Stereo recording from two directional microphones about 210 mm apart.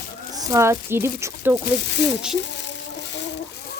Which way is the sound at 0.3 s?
15° right (ahead or behind).